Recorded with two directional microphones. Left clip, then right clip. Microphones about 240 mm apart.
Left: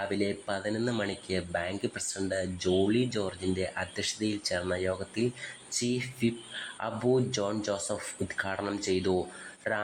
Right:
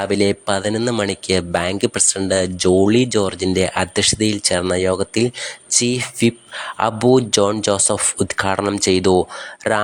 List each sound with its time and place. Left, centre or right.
0.0 s speech: right